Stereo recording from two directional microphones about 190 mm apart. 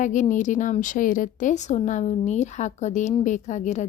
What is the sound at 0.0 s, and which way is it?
A woman's voice, 40° left (ahead or behind).